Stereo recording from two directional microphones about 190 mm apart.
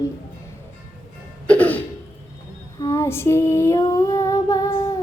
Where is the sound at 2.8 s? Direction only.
15° left (ahead or behind).